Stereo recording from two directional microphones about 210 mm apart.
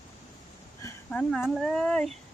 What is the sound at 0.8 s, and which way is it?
Speech, 10° left (ahead or behind).